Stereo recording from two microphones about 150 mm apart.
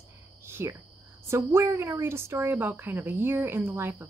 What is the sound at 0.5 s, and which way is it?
Cricket, 15° right (ahead or behind).